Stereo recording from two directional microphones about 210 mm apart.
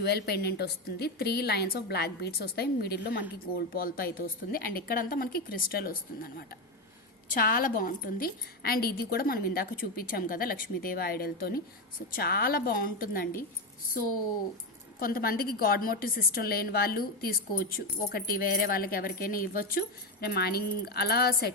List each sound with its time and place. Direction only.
0.0 s a woman's voice: 50° left (ahead or behind)
14.9 s a woman's voice: 45° left (ahead or behind)